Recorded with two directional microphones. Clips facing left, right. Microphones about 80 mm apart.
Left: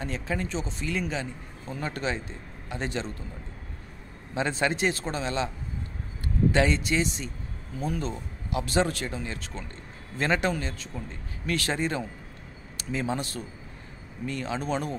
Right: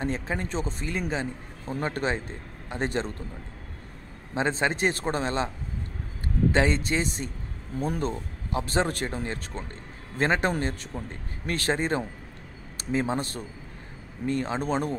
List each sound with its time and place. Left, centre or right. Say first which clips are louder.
0.0 s a man's voice: right 2 dB; right
4.3 s a man's voice: right 1 dB; right
6.5 s a man's voice: even; right
10.5 s speech: right 3 dB; right
11.1 s a man's voice: left 2 dB; right